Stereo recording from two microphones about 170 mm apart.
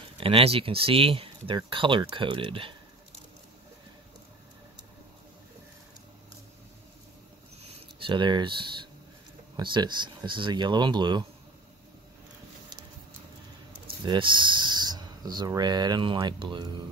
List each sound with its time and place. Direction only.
0.2 s speech: 35° right (ahead or behind)
7.6 s speech: 30° right (ahead or behind)
14.0 s speech: 30° right (ahead or behind)